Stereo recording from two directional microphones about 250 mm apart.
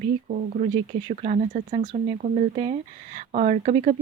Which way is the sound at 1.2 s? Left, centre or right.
Right.